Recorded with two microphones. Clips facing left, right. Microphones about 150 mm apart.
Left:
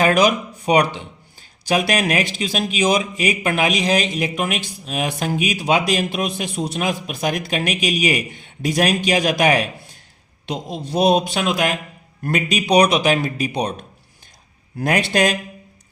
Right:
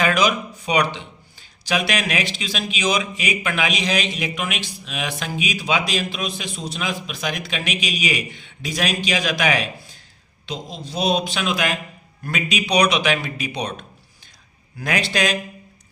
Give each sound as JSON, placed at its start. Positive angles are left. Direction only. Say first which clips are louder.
{"t": 0.0, "sound": "speech", "louder": "left 4 dB", "side_deg": 50}
{"t": 10.4, "sound": "a man's voice", "louder": "left 5 dB", "side_deg": 65}
{"t": 14.8, "sound": "speech", "louder": "left 4 dB", "side_deg": 55}